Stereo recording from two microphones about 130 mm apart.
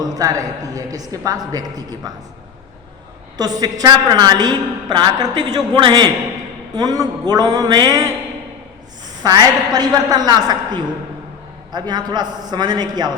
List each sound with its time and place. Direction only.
0.0 s a woman's voice: 30° right (ahead or behind)
3.3 s a man's voice: 30° right (ahead or behind)
9.2 s a man's voice: 30° right (ahead or behind)